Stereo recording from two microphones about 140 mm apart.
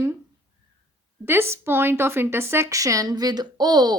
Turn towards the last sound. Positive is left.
turn(degrees=-30)  # may be behind; listen again after turning